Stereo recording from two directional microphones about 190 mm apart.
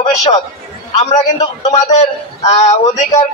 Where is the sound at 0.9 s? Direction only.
35° left (ahead or behind).